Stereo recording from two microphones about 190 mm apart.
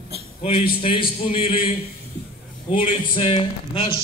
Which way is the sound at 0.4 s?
30° left (ahead or behind).